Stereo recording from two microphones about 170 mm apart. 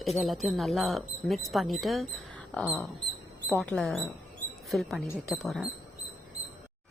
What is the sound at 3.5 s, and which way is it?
Speech, 5° left (ahead or behind).